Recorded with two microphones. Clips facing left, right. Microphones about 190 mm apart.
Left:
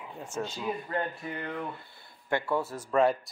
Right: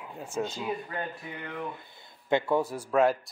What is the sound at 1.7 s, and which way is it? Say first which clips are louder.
Speech: even; 20° right (ahead or behind).